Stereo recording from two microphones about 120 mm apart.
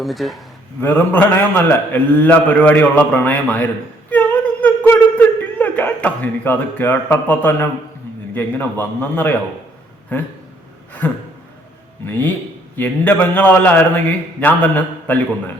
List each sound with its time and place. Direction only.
0.0 s speech: centre (ahead or behind)
0.8 s a man's voice: 15° left (ahead or behind)
4.1 s a sound: 15° left (ahead or behind)
8.4 s a man's voice: 15° left (ahead or behind)
11.0 s a man's voice: 15° left (ahead or behind)